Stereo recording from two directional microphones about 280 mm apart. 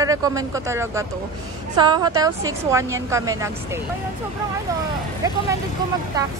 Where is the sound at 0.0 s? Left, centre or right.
Centre.